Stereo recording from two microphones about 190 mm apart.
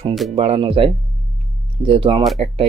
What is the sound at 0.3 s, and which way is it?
Speech, 30° right (ahead or behind).